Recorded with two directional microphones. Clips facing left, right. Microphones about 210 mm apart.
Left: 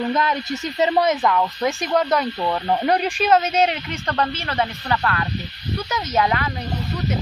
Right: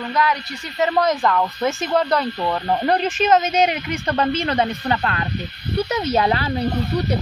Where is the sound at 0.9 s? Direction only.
5° left (ahead or behind).